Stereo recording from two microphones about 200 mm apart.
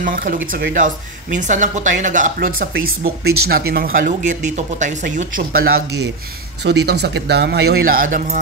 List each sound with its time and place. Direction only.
0.0 s a man's voice: 45° right (ahead or behind)